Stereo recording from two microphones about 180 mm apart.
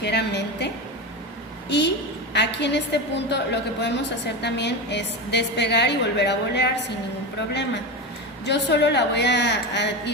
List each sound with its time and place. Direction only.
0.0 s a sound: 70° left (ahead or behind)
1.7 s a woman's voice: 70° left (ahead or behind)
8.4 s a woman's voice: 70° left (ahead or behind)